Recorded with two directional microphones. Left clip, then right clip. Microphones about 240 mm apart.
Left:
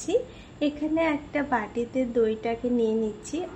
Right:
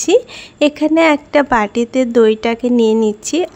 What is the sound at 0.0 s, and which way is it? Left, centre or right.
A woman's voice, right.